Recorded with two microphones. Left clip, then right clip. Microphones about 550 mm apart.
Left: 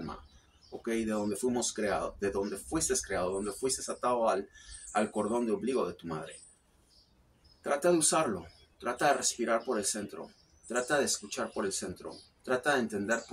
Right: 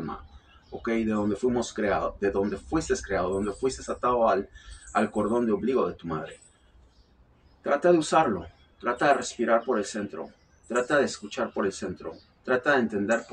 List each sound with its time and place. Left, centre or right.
0.8 s speech: left
7.6 s speech: left